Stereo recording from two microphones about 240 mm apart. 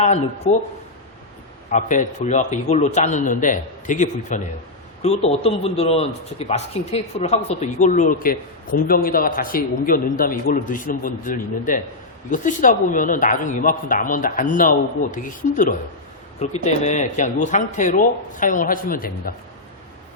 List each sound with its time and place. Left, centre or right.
1.7 s a man's voice: left